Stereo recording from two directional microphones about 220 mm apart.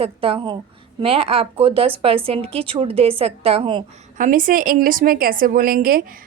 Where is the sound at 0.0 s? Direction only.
25° right (ahead or behind).